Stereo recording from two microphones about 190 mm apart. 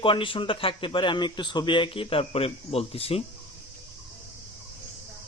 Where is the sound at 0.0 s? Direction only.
25° left (ahead or behind).